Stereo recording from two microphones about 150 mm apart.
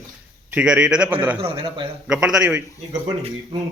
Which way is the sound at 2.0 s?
5° right (ahead or behind).